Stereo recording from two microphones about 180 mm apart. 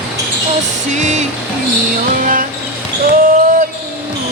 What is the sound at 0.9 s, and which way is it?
Music, 40° right (ahead or behind).